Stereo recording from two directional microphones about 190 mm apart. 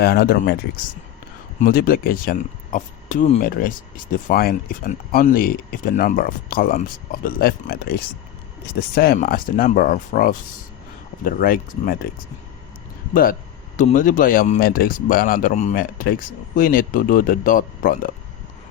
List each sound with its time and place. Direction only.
0.0 s speech: 55° left (ahead or behind)
1.6 s speech: 50° left (ahead or behind)
13.7 s speech: 40° left (ahead or behind)